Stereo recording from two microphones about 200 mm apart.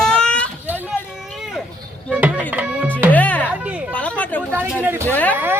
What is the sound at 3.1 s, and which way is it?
Music, 5° left (ahead or behind).